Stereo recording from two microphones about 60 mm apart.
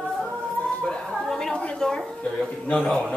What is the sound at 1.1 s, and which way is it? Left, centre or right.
A woman's voice, centre.